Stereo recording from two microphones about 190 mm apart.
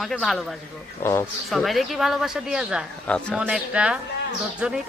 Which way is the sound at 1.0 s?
10° left (ahead or behind).